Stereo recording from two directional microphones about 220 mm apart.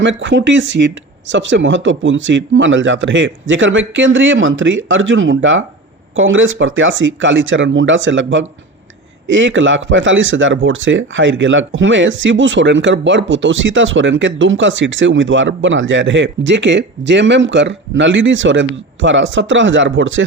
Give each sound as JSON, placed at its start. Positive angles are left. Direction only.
{"t": 0.0, "sound": "a man's voice", "side_deg": -55}